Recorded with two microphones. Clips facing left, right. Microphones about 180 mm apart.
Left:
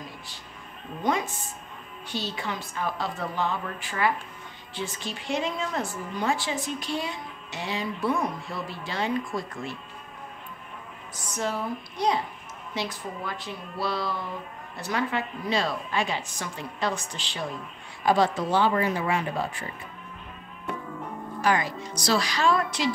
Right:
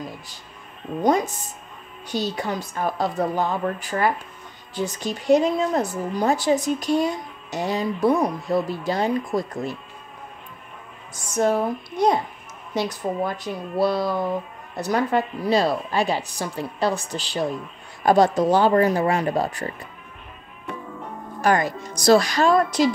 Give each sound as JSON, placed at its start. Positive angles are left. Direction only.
{"t": 1.0, "sound": "a woman's voice", "side_deg": -40}
{"t": 11.3, "sound": "a woman's voice", "side_deg": -50}
{"t": 21.4, "sound": "a woman's voice", "side_deg": -45}